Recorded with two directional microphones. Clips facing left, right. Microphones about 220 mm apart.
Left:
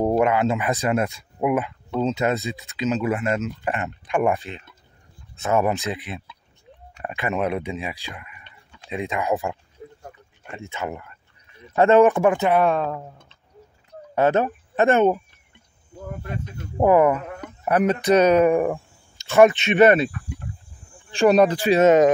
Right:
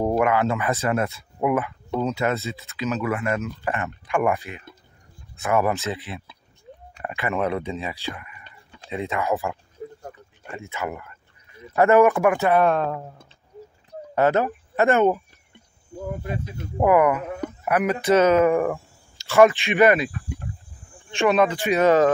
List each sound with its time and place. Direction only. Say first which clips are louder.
0.0 s speech: left 1 dB; 20° left (ahead or behind)
10.7 s speech: even; 20° left (ahead or behind)
12.4 s speech: even; 15° left (ahead or behind)
12.6 s speech: even; centre (ahead or behind)
14.1 s speech: left 1 dB; 15° left (ahead or behind)
16.0 s speech: right 4 dB; 15° right (ahead or behind)
16.8 s speech: left 1 dB; 25° left (ahead or behind)
18.0 s speech: even; 15° left (ahead or behind)
21.1 s speech: left 3 dB; 35° left (ahead or behind); by 22.1 s 20° left (ahead or behind)